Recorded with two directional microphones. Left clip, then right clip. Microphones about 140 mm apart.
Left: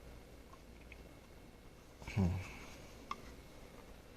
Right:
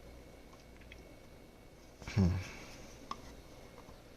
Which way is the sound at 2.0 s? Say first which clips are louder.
Right 4 dB; 50° right (ahead or behind).